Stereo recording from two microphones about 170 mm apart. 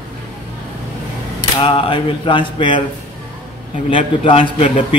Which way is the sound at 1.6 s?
35° left (ahead or behind).